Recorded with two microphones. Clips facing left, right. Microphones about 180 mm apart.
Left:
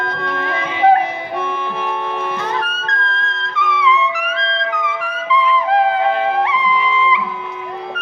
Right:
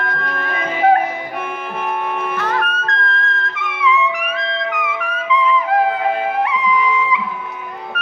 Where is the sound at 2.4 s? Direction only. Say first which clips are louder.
Right 2 dB; 15° left (ahead or behind).